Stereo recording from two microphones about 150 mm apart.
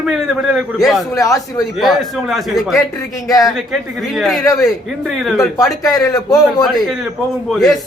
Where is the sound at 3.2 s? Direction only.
25° left (ahead or behind).